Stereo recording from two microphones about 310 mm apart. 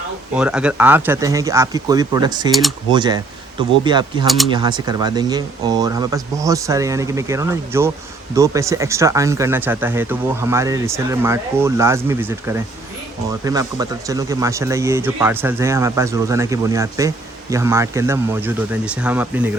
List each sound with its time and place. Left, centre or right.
0.3 s speech: centre
2.5 s speech: centre
2.9 s speech: centre